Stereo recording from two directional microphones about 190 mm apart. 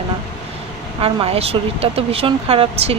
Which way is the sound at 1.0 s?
30° right (ahead or behind).